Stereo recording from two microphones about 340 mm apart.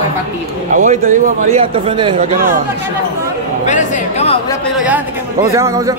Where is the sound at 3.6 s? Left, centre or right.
Centre.